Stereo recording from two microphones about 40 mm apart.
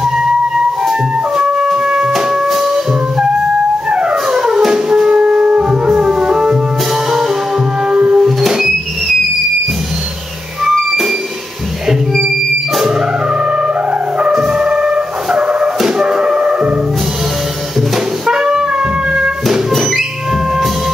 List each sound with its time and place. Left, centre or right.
1.4 s music: right
2.1 s music: centre
7.9 s music: centre
14.4 s music: centre
15.8 s music: centre
18.2 s wind instrument: centre